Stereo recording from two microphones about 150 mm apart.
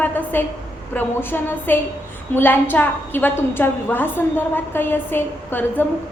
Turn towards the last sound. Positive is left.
turn(degrees=15)  # may be behind; listen again after turning